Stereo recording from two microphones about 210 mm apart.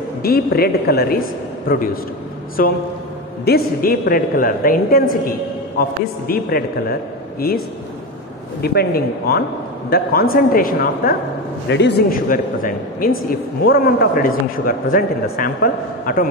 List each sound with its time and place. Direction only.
0.2 s a man's voice: 45° left (ahead or behind)
2.6 s a man's voice: 40° left (ahead or behind)
11.7 s speech: 55° left (ahead or behind)
12.3 s a man's voice: 40° left (ahead or behind)